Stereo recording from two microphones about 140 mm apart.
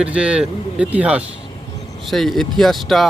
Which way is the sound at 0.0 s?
5° right (ahead or behind).